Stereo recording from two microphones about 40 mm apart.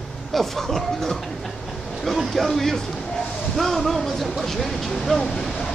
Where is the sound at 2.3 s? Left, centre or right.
Centre.